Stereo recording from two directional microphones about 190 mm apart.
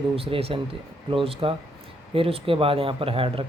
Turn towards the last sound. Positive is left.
turn(degrees=-30)  # may be behind; listen again after turning